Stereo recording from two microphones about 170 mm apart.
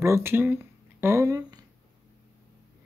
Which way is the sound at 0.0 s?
15° right (ahead or behind).